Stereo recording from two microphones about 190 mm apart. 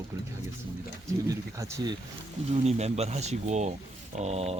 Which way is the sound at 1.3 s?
15° right (ahead or behind).